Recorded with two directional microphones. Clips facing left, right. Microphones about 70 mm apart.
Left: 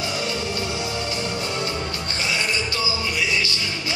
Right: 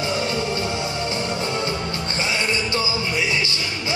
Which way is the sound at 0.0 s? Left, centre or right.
Right.